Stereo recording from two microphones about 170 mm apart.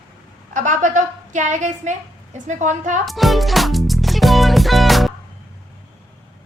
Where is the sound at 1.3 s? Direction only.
45° right (ahead or behind).